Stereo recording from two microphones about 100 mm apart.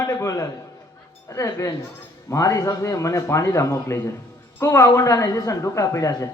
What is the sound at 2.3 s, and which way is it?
A man's voice, 35° left (ahead or behind).